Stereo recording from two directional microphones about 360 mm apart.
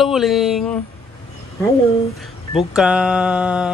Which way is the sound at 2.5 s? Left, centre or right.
Centre.